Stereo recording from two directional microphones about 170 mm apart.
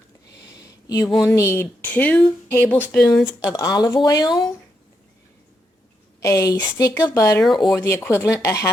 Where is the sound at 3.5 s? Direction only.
20° left (ahead or behind).